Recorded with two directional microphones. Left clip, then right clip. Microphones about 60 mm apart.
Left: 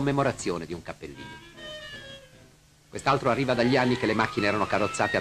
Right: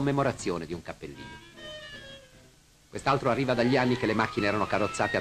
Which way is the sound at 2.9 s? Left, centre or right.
Left.